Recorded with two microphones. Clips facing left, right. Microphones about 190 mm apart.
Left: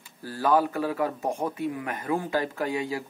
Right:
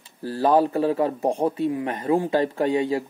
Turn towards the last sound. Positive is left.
turn(degrees=-30)  # may be behind; listen again after turning